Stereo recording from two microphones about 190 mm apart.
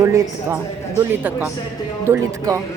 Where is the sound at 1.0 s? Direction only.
10° right (ahead or behind).